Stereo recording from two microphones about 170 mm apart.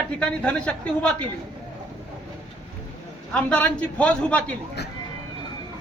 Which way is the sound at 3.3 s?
5° left (ahead or behind).